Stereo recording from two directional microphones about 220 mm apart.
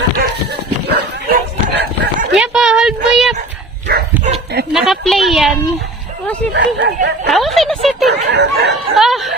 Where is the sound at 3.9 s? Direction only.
35° right (ahead or behind).